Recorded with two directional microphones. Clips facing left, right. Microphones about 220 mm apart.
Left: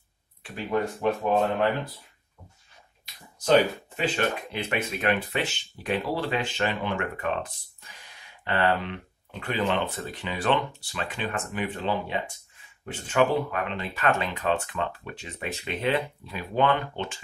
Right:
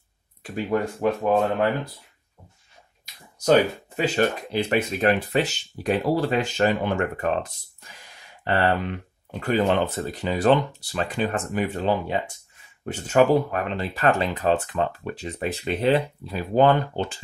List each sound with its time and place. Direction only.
0.4 s speech: 40° right (ahead or behind)
3.4 s speech: 40° right (ahead or behind)
8.5 s speech: 45° right (ahead or behind)